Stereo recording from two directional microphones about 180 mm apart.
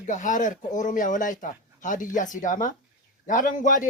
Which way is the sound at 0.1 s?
45° left (ahead or behind).